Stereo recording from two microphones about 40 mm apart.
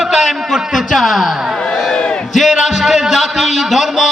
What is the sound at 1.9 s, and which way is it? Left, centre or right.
Battle cry, left.